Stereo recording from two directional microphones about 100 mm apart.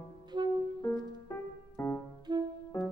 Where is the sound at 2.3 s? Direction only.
45° right (ahead or behind).